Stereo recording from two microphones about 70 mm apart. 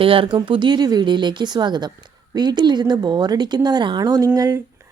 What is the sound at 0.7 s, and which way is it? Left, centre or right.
A woman's voice, right.